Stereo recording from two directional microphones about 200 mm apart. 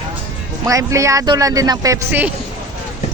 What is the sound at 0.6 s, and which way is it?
Speech, 15° right (ahead or behind).